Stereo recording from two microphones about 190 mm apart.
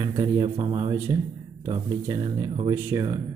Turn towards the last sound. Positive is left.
turn(degrees=-20)  # may be behind; listen again after turning